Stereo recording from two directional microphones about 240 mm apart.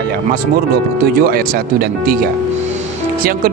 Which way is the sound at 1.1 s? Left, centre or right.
Right.